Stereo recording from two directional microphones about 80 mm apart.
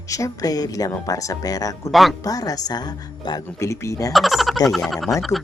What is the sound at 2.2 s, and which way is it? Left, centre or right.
Speech, left.